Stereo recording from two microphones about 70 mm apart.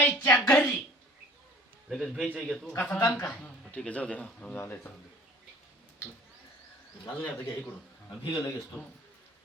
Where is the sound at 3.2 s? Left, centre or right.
Centre.